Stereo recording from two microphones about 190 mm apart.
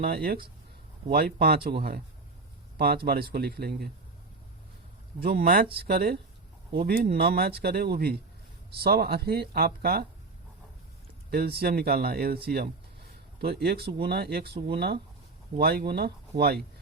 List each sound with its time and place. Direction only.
0.0 s speech: 50° right (ahead or behind)
2.7 s speech: 55° right (ahead or behind)
5.2 s speech: 50° right (ahead or behind)
11.3 s speech: 55° right (ahead or behind)